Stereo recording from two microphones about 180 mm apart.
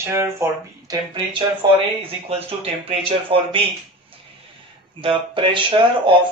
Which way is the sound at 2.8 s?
30° right (ahead or behind).